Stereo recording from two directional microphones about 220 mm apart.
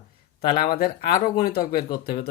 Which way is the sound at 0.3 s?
45° left (ahead or behind).